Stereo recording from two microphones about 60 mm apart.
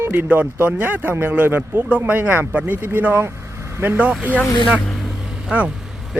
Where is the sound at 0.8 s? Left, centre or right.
Right.